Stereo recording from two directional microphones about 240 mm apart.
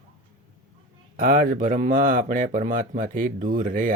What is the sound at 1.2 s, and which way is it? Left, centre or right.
Speech, right.